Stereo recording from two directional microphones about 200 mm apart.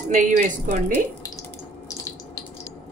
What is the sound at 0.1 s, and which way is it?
Speech, 40° right (ahead or behind).